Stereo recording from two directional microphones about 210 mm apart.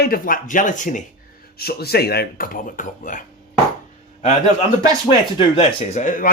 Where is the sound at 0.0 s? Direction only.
45° left (ahead or behind).